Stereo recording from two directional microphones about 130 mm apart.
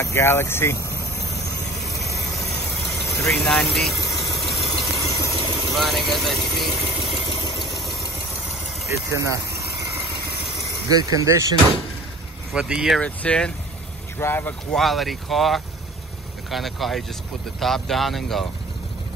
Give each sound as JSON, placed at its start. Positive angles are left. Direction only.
{"t": 0.0, "sound": "speech", "side_deg": 20}
{"t": 1.9, "sound": "vehicle", "side_deg": 25}
{"t": 3.4, "sound": "speech", "side_deg": 5}
{"t": 4.1, "sound": "engine", "side_deg": 0}
{"t": 4.6, "sound": "vehicle", "side_deg": 25}
{"t": 5.8, "sound": "speech", "side_deg": 0}
{"t": 8.8, "sound": "speech", "side_deg": -25}
{"t": 10.9, "sound": "speech", "side_deg": -30}
{"t": 12.5, "sound": "speech", "side_deg": -5}
{"t": 13.0, "sound": "speech", "side_deg": 10}
{"t": 14.8, "sound": "speech", "side_deg": 0}